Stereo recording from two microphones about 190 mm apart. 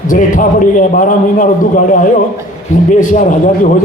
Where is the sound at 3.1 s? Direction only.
40° left (ahead or behind).